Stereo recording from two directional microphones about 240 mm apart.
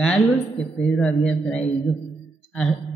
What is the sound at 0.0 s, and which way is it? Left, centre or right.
A woman's voice, centre.